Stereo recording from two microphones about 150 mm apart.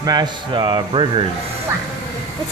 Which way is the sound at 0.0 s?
25° right (ahead or behind).